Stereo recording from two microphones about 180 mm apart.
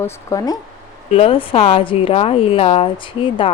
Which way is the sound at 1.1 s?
30° left (ahead or behind).